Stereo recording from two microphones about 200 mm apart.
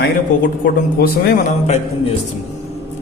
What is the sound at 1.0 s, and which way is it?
Speech, 45° left (ahead or behind).